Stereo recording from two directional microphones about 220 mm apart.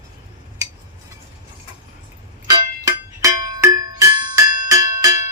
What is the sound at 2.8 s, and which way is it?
Music, 15° right (ahead or behind).